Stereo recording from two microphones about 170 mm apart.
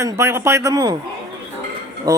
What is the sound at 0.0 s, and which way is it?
Speech, 15° right (ahead or behind).